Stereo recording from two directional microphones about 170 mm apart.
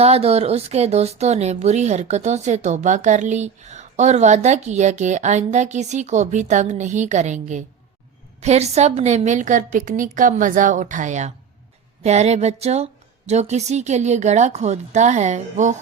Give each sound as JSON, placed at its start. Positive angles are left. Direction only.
{"t": 0.0, "sound": "speech", "side_deg": -35}